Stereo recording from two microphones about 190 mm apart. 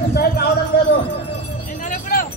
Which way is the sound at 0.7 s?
60° left (ahead or behind).